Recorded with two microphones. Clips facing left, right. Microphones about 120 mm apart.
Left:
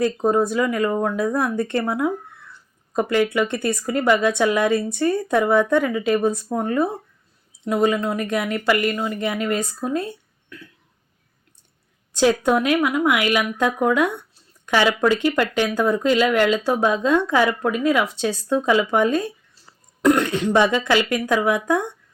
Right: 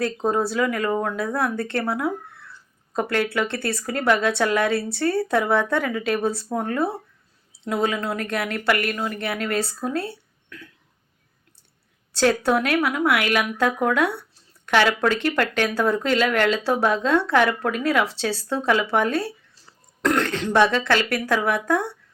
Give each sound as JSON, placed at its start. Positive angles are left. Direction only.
{"t": 0.0, "sound": "speech", "side_deg": 5}
{"t": 1.2, "sound": "speech", "side_deg": 15}
{"t": 12.1, "sound": "speech", "side_deg": 15}